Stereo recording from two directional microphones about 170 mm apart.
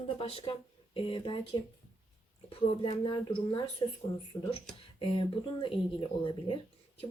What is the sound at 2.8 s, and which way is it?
Speech, 30° left (ahead or behind).